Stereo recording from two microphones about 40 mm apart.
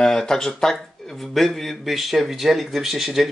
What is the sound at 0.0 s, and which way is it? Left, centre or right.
Speech, centre.